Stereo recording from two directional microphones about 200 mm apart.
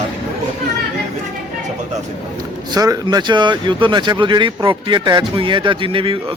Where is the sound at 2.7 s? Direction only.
20° right (ahead or behind).